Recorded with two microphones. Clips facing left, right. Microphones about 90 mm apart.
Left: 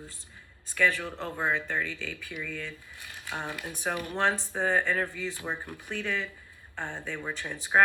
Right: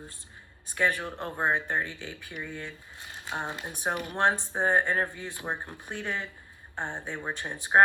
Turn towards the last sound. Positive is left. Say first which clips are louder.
# right 2 dB
turn(degrees=-20)  # may be behind; listen again after turning